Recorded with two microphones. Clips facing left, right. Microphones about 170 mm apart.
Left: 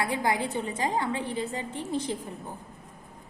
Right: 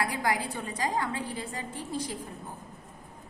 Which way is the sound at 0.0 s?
25° left (ahead or behind).